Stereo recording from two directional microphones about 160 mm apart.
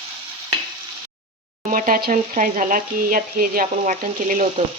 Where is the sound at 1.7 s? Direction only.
60° right (ahead or behind).